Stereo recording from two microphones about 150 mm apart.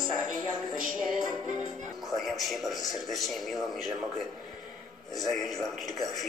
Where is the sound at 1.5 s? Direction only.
Centre (ahead or behind).